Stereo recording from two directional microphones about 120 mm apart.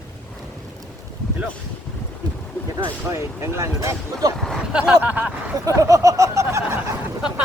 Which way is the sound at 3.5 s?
25° right (ahead or behind).